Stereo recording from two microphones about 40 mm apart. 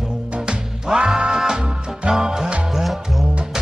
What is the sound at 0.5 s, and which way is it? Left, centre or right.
Music, right.